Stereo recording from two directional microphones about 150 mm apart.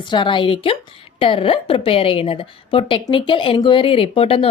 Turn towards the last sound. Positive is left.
turn(degrees=40)  # may be behind; listen again after turning